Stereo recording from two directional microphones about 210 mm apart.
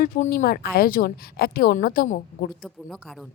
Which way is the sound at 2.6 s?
Centre (ahead or behind).